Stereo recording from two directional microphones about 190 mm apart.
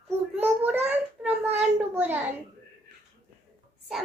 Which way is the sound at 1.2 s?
10° right (ahead or behind).